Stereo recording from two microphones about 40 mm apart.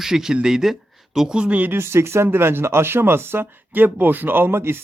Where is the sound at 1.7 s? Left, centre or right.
Right.